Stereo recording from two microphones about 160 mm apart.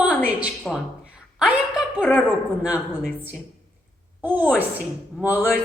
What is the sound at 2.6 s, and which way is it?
Speech, 10° right (ahead or behind).